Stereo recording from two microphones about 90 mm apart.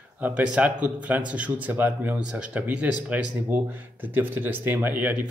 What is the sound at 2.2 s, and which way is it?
Speech, 10° right (ahead or behind).